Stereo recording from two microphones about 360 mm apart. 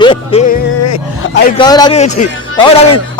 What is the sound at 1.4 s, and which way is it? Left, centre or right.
Music, centre.